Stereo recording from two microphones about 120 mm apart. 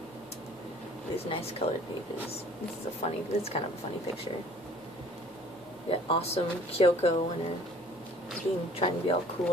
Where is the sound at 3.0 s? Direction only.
65° left (ahead or behind).